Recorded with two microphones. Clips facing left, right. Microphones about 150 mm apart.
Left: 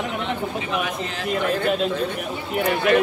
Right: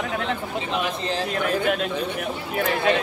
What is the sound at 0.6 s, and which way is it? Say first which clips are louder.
Speech: even; 30° right (ahead or behind).